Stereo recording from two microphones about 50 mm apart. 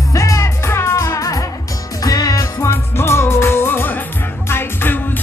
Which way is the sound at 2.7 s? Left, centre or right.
Left.